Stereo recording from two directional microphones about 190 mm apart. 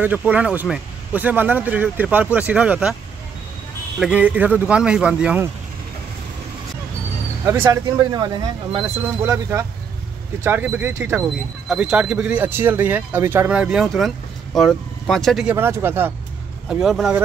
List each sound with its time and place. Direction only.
0.0 s speech: 10° right (ahead or behind)
4.0 s speech: 5° right (ahead or behind)
7.4 s speech: 15° right (ahead or behind)
15.5 s speech: 10° right (ahead or behind)